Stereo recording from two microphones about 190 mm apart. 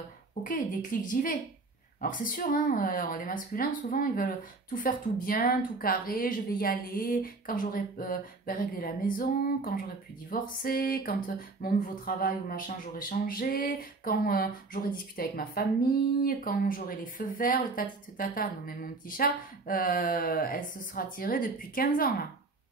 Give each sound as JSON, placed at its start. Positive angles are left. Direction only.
{"t": 0.4, "sound": "speech", "side_deg": 45}